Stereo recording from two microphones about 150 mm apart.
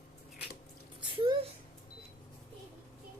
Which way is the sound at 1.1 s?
35° right (ahead or behind).